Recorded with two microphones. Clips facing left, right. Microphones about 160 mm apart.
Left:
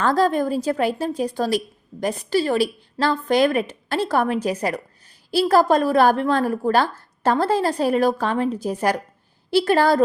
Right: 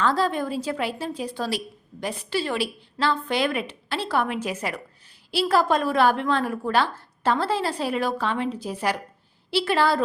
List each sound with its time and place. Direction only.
0.0 s a woman's voice: 45° left (ahead or behind)